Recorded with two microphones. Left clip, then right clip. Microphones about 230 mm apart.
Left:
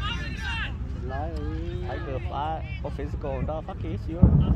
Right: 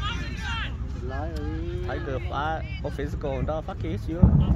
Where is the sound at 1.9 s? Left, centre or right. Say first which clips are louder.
Right 2 dB; right.